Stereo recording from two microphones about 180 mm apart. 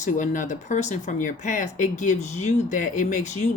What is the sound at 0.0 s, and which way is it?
Speech, 45° left (ahead or behind).